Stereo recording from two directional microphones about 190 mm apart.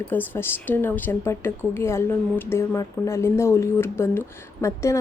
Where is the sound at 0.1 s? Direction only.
10° left (ahead or behind).